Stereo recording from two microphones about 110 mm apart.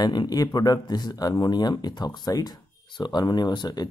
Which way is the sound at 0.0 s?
40° left (ahead or behind).